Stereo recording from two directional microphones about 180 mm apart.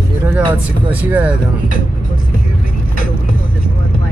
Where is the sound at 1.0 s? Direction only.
10° right (ahead or behind).